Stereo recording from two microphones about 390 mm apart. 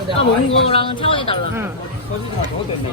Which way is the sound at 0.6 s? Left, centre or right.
Centre.